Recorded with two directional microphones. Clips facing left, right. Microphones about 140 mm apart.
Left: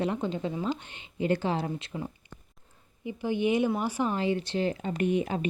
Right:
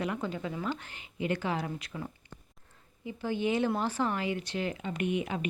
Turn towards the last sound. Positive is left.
turn(degrees=35)  # may be behind; listen again after turning